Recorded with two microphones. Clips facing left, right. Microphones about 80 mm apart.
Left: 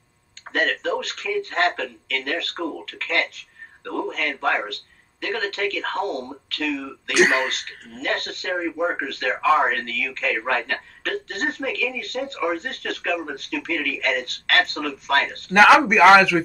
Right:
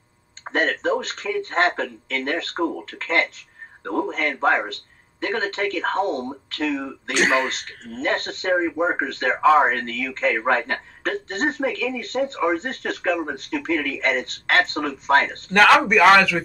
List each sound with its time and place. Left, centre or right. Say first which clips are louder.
0.5 s speech: right 2 dB; right
7.2 s a man's voice: left 2 dB; centre
8.0 s speech: right 3 dB; right
15.5 s a man's voice: left 1 dB; centre